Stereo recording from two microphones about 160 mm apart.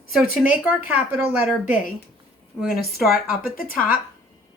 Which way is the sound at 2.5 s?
5° left (ahead or behind).